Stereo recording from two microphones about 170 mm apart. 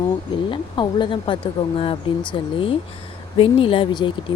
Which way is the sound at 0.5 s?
30° left (ahead or behind).